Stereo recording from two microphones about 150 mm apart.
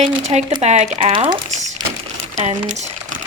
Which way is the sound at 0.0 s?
45° right (ahead or behind).